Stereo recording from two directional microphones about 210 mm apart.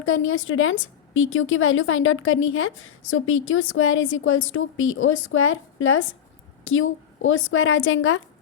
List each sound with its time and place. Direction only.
0.0 s a woman's voice: 75° left (ahead or behind)